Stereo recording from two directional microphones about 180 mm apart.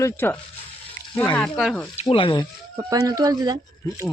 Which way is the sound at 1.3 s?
Centre (ahead or behind).